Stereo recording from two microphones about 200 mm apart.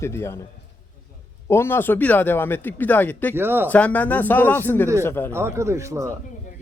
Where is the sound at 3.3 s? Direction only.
10° right (ahead or behind).